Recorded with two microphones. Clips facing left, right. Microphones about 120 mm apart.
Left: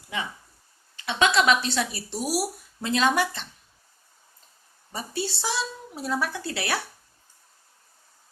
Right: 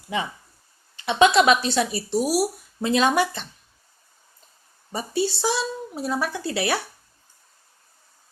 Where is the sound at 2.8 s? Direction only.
10° right (ahead or behind).